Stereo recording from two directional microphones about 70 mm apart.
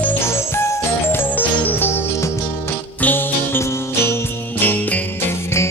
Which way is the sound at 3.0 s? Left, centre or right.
Left.